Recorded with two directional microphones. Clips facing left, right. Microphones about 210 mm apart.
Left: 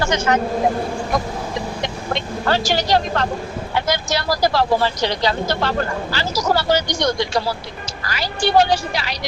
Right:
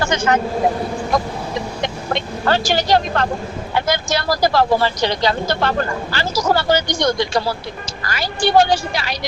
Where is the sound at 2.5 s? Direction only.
50° right (ahead or behind).